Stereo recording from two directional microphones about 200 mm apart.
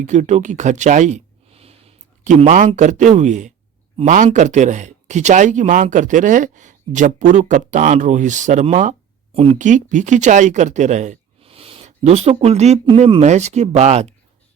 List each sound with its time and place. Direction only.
0.0 s speech: 35° right (ahead or behind)